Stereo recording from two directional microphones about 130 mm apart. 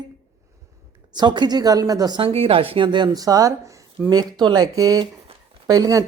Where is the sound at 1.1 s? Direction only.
35° right (ahead or behind).